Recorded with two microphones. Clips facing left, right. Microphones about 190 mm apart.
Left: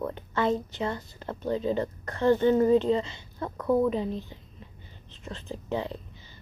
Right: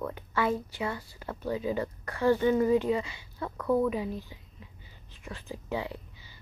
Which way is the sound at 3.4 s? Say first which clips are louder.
Left 2 dB; 15° left (ahead or behind).